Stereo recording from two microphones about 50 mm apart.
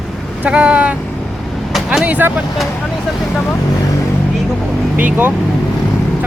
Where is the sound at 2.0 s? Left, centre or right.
Right.